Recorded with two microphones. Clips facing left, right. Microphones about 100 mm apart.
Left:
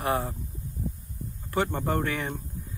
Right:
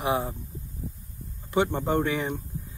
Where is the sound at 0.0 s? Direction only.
15° right (ahead or behind).